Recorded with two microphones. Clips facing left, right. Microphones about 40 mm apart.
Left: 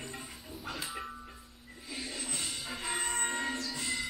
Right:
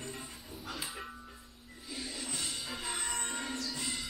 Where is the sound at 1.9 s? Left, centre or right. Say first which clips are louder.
Left 1 dB; centre.